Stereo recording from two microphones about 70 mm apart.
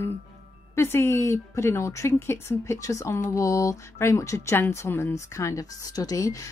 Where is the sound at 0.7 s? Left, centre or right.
Left.